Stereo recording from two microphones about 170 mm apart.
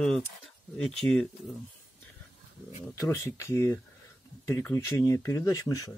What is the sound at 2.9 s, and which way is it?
Speech, 20° left (ahead or behind).